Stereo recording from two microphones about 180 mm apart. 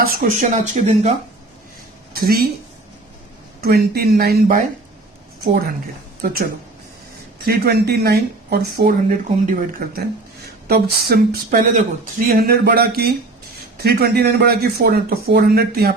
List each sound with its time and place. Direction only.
0.0 s speech: 45° right (ahead or behind)
2.2 s speech: 55° right (ahead or behind)
3.6 s speech: 60° right (ahead or behind)
7.4 s speech: 60° right (ahead or behind)
12.3 s speech: 60° right (ahead or behind)